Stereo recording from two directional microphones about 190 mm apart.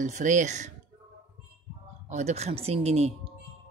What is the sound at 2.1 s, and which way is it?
Speech, 35° right (ahead or behind).